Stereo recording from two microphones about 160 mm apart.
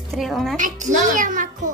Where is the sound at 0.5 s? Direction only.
50° right (ahead or behind).